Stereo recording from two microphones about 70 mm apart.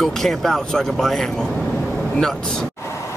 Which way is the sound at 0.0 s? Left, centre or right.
Centre.